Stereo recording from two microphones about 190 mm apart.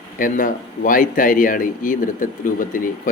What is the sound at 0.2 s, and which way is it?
Speech, 45° left (ahead or behind).